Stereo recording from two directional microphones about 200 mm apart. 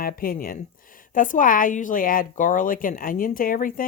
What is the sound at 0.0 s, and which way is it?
A woman's voice, 45° left (ahead or behind).